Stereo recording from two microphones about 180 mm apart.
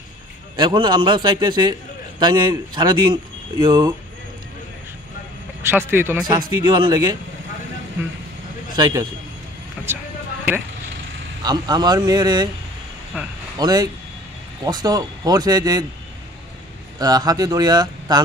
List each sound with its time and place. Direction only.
0.6 s a man's voice: 25° right (ahead or behind)
5.7 s speech: 10° right (ahead or behind)
6.6 s a man's voice: 25° right (ahead or behind)
8.7 s speech: 25° right (ahead or behind)
9.8 s vehicle: 5° right (ahead or behind)
11.4 s a man's voice: 20° right (ahead or behind)
13.6 s a man's voice: 20° right (ahead or behind)
17.0 s a man's voice: 20° right (ahead or behind)